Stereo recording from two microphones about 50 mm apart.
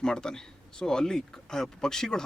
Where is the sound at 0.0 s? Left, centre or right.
Centre.